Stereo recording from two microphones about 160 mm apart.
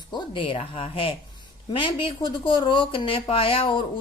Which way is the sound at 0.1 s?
30° left (ahead or behind).